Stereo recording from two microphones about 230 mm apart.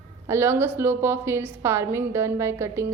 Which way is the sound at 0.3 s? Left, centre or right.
Centre.